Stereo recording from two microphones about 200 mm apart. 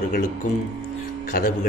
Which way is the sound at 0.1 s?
40° left (ahead or behind).